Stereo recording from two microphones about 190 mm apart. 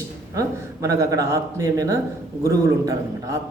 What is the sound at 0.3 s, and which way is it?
Speech, 15° right (ahead or behind).